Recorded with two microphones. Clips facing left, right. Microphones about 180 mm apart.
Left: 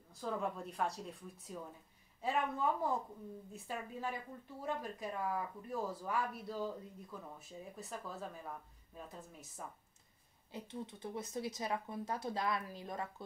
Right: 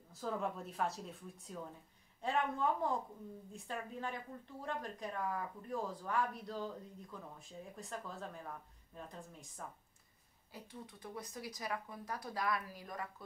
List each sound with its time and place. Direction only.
0.1 s speech: centre (ahead or behind)
10.5 s speech: 25° left (ahead or behind)